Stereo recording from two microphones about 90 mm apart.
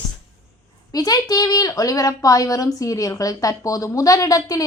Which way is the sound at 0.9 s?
45° left (ahead or behind).